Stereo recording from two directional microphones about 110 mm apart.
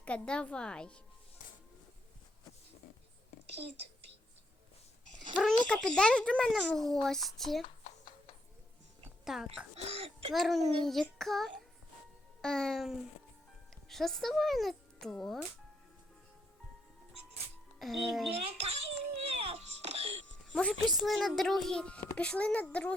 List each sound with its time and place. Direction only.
0.0 s a woman's voice: 10° left (ahead or behind)
5.4 s a child's voice: 5° left (ahead or behind)
9.2 s a child's voice: 5° right (ahead or behind)
9.7 s a child's voice: 65° right (ahead or behind)
10.3 s a child's voice: centre (ahead or behind)
17.7 s a child's voice: centre (ahead or behind)
18.3 s a child's voice: 65° right (ahead or behind)
19.3 s music: 65° right (ahead or behind)
20.5 s a woman's voice: 10° left (ahead or behind)